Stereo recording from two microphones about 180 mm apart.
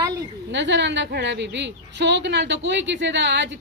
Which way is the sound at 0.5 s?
75° right (ahead or behind).